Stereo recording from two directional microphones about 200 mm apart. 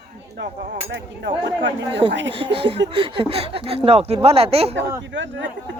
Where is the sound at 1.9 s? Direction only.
25° right (ahead or behind).